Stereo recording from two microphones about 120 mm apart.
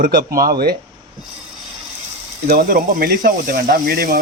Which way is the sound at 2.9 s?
90° right.